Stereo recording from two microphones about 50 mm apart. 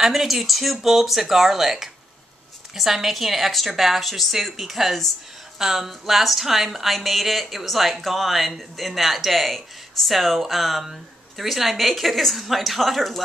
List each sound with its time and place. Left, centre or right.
0.0 s a woman's voice: centre